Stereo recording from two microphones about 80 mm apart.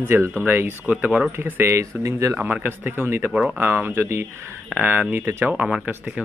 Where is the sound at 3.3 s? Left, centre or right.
Centre.